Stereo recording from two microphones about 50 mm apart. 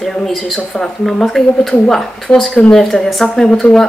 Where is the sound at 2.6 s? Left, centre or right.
Centre.